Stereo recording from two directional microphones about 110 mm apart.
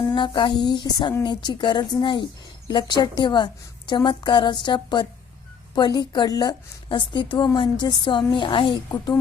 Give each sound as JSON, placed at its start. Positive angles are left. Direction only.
{"t": 0.1, "sound": "a woman's voice", "side_deg": 45}
{"t": 6.8, "sound": "a woman's voice", "side_deg": 50}